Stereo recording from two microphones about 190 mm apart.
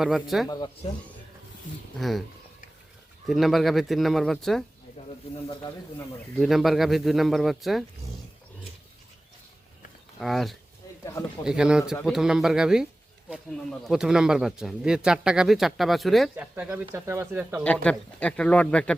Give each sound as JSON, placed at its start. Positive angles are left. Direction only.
{"t": 0.0, "sound": "speech", "side_deg": 0}
{"t": 0.4, "sound": "speech", "side_deg": 20}
{"t": 2.0, "sound": "speech", "side_deg": 0}
{"t": 3.2, "sound": "speech", "side_deg": 0}
{"t": 6.4, "sound": "speech", "side_deg": 0}
{"t": 10.2, "sound": "speech", "side_deg": 0}
{"t": 17.6, "sound": "speech", "side_deg": 5}